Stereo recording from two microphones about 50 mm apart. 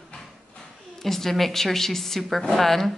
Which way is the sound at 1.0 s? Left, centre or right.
Centre.